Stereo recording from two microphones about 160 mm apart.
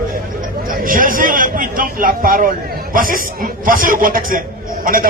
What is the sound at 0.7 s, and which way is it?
A man's voice, 60° right (ahead or behind).